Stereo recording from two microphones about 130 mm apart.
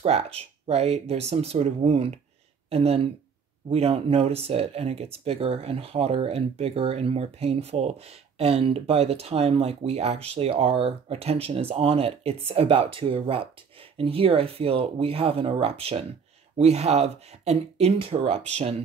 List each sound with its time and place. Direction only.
0.0 s speech: 50° right (ahead or behind)